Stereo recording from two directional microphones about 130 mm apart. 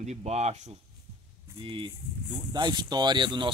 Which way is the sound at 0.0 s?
60° right (ahead or behind).